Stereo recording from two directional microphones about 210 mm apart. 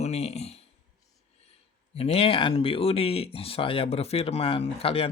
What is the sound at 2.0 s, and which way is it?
Speech, 30° left (ahead or behind).